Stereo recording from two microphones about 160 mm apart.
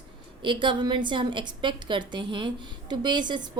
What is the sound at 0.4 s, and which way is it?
A woman's voice, 30° right (ahead or behind).